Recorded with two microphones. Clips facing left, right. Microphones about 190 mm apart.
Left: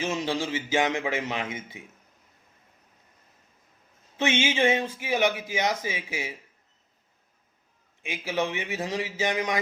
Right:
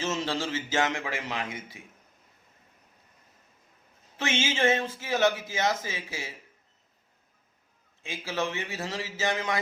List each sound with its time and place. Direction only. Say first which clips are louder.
0.0 s a man's voice: left 2 dB; 15° left (ahead or behind)
4.2 s a man's voice: left 3 dB; 15° left (ahead or behind)
8.0 s a man's voice: left 3 dB; 15° left (ahead or behind)